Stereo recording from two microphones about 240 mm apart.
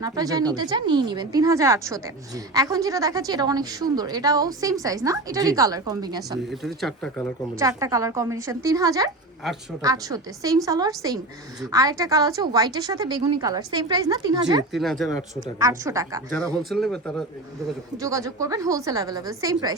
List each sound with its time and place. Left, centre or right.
0.0 s a woman's voice: centre
6.5 s speech: centre
7.6 s a woman's voice: centre
14.7 s speech: centre
15.6 s a woman's voice: centre
16.6 s speech: centre
17.9 s a woman's voice: centre